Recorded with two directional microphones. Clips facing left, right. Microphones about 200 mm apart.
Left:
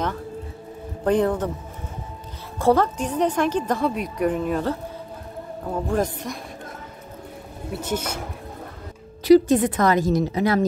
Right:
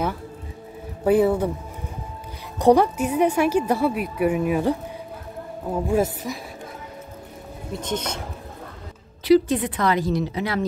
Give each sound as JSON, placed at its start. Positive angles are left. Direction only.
{"t": 1.0, "sound": "a woman's voice", "side_deg": -10}
{"t": 2.6, "sound": "a woman's voice", "side_deg": -15}
{"t": 5.9, "sound": "speech", "side_deg": -5}
{"t": 7.7, "sound": "speech", "side_deg": 10}
{"t": 9.2, "sound": "a woman's voice", "side_deg": 45}